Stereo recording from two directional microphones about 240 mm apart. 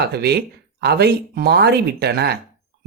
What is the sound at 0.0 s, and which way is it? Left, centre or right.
Speech, right.